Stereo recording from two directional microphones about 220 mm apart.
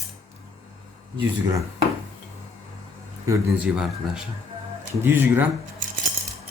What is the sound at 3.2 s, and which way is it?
Speech, 10° right (ahead or behind).